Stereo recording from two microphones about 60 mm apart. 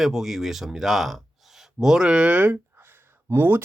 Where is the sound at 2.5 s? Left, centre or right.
Right.